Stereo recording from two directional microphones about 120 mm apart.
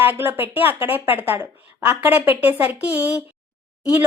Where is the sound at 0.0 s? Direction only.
15° right (ahead or behind).